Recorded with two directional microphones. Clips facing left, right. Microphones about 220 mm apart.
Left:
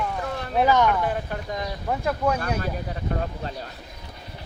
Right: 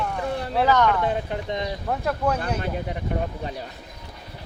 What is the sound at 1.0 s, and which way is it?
Speech, 20° right (ahead or behind).